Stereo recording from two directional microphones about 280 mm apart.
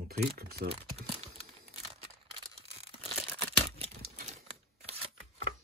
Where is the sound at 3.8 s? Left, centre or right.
Right.